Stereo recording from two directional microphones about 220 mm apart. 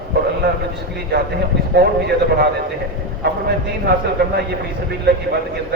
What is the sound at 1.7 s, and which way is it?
A man's voice, 45° right (ahead or behind).